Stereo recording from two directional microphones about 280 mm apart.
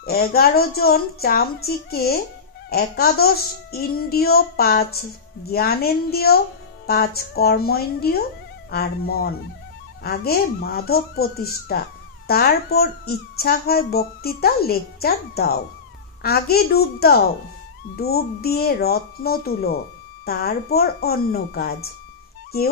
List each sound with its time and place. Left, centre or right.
0.0 s a child's voice: left